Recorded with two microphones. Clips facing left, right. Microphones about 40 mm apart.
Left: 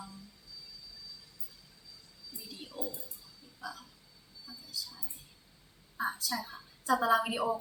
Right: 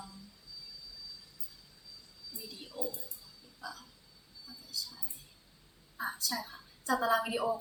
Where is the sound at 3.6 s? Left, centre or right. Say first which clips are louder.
Left 2 dB; centre.